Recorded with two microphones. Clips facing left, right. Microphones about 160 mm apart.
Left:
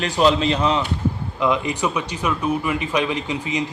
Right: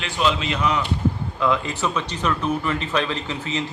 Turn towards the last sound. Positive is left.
turn(degrees=15)  # may be behind; listen again after turning